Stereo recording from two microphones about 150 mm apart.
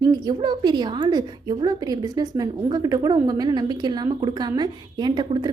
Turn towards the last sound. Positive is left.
turn(degrees=-30)  # may be behind; listen again after turning